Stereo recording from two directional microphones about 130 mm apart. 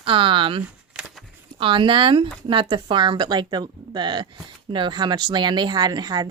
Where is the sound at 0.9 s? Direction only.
10° right (ahead or behind).